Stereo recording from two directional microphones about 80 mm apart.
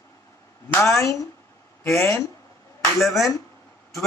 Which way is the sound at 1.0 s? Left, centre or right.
Left.